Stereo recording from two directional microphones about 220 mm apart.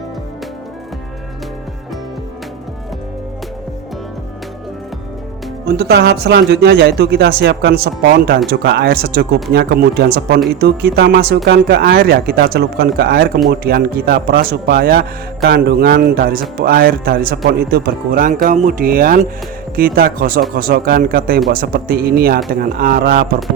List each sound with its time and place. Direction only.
5.6 s a man's voice: 50° right (ahead or behind)